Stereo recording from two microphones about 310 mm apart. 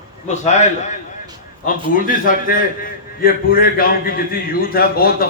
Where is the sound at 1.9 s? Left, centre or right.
Left.